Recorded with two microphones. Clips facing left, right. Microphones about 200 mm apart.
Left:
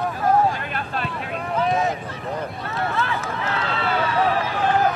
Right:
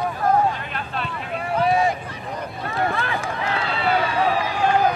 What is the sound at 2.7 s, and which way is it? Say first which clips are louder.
Speech: right 1 dB; 15° right (ahead or behind).